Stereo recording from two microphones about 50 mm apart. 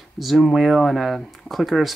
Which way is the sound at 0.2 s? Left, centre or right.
Centre.